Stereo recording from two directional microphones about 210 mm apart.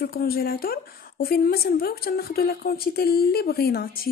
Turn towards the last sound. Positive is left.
turn(degrees=45)  # may be behind; listen again after turning